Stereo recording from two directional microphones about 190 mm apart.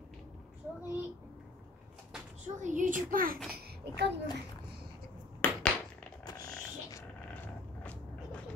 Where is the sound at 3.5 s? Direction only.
55° right (ahead or behind).